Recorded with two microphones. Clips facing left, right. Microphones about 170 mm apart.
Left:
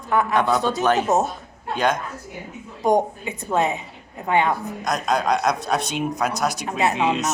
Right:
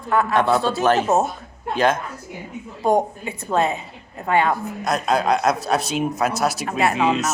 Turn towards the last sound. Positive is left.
turn(degrees=0)  # may be behind; listen again after turning